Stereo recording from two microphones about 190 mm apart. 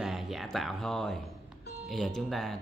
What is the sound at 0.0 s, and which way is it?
Speech, centre (ahead or behind).